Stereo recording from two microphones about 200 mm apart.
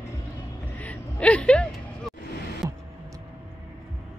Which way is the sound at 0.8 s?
5° left (ahead or behind).